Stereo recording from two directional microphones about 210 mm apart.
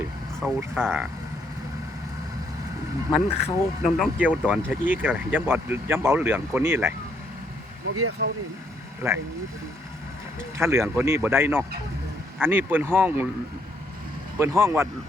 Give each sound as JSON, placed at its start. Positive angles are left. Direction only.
{"t": 0.3, "sound": "speech", "side_deg": 0}
{"t": 3.4, "sound": "speech", "side_deg": 0}
{"t": 7.9, "sound": "speech", "side_deg": -90}
{"t": 9.0, "sound": "speech", "side_deg": -15}
{"t": 10.6, "sound": "speech", "side_deg": -10}
{"t": 14.3, "sound": "speech", "side_deg": -15}